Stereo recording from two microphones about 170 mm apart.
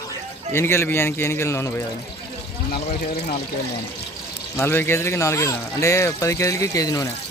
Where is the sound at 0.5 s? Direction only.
15° left (ahead or behind).